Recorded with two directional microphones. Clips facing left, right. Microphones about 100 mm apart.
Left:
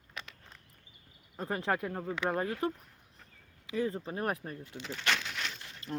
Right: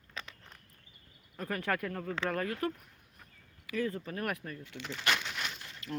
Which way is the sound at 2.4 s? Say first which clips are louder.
Left 1 dB; 25° left (ahead or behind).